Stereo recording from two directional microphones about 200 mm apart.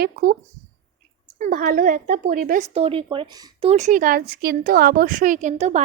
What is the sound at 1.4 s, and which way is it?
Speech, 40° right (ahead or behind).